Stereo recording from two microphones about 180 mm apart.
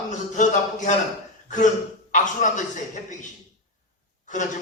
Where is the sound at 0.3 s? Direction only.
45° left (ahead or behind).